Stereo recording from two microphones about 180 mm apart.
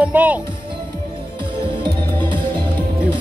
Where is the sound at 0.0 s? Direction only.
10° right (ahead or behind).